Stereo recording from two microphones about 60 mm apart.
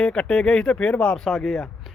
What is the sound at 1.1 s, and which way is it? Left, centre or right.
Speech, centre.